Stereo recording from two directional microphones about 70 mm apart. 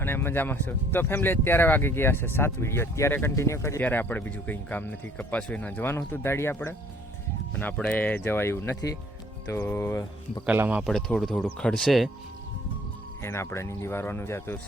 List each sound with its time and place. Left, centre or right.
0.0 s speech: left
3.3 s speech: left
3.8 s speech: left
6.1 s speech: left
7.5 s speech: centre
8.2 s speech: left
10.8 s speech: centre
13.2 s speech: left